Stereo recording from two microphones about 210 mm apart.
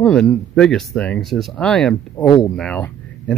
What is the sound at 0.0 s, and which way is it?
Speech, 5° left (ahead or behind).